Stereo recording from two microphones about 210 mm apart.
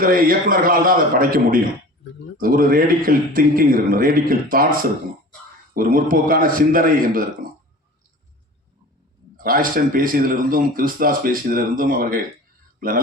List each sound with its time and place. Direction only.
0.0 s a man's voice: 40° right (ahead or behind)
9.4 s speech: 40° right (ahead or behind)